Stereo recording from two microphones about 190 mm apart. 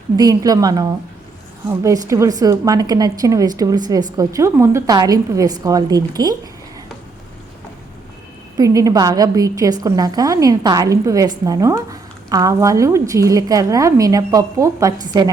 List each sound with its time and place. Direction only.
0.2 s a woman's voice: 20° right (ahead or behind)
8.5 s a woman's voice: 20° right (ahead or behind)